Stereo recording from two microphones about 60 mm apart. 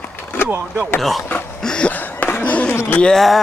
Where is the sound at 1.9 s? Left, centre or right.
Left.